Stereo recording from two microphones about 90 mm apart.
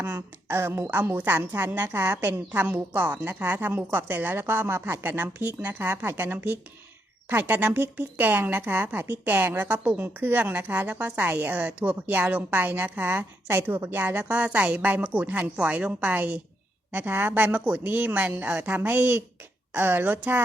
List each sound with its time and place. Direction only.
0.0 s speech: 25° right (ahead or behind)